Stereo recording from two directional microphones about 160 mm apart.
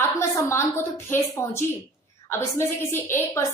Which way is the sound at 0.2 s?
15° left (ahead or behind).